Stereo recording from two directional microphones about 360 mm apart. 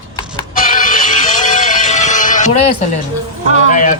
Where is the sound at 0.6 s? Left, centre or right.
Left.